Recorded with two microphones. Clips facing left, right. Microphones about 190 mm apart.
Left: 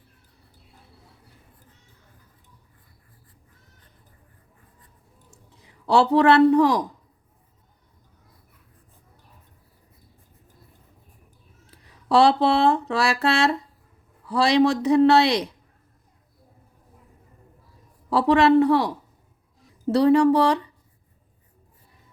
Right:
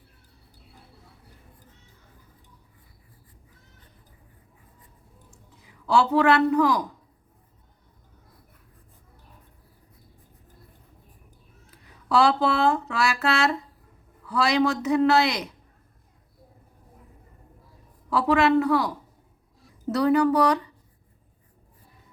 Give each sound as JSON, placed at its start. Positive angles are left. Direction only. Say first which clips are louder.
{"t": 5.3, "sound": "speech", "louder": "even", "side_deg": 35}
{"t": 11.7, "sound": "a man's voice", "louder": "left 3 dB", "side_deg": 30}
{"t": 18.1, "sound": "a man's voice", "louder": "left 3 dB", "side_deg": 35}
{"t": 19.9, "sound": "speech", "louder": "left 4 dB", "side_deg": 30}